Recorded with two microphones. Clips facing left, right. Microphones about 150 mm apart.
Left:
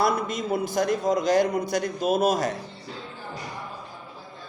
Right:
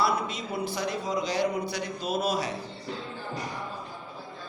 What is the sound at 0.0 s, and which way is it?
A man's voice, 45° left (ahead or behind).